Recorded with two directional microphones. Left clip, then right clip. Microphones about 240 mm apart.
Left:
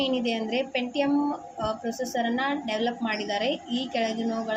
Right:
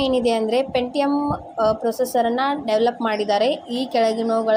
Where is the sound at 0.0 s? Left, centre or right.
Right.